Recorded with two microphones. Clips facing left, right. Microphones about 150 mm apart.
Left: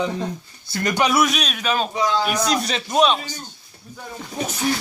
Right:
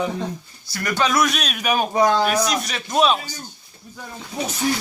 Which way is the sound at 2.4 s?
30° left (ahead or behind).